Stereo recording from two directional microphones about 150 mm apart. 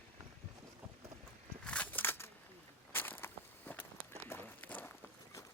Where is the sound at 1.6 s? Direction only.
10° left (ahead or behind).